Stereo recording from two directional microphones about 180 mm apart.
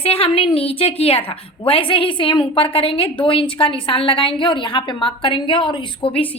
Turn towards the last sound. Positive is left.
turn(degrees=30)  # may be behind; listen again after turning